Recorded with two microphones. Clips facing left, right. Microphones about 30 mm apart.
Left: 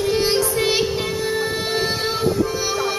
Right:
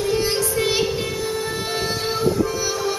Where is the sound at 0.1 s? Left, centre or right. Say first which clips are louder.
Left 3 dB; left.